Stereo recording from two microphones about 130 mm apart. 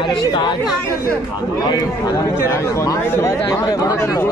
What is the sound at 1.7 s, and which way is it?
Speech, 25° left (ahead or behind).